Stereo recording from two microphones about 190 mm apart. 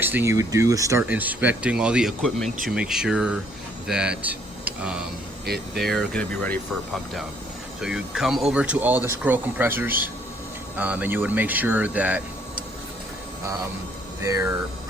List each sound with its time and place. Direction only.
0.0 s speech: 10° right (ahead or behind)
5.5 s speech: 55° right (ahead or behind)
5.9 s speech: 5° left (ahead or behind)
14.2 s speech: 15° right (ahead or behind)